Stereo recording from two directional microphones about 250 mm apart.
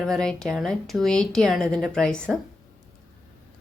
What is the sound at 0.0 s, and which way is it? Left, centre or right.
Speech, centre.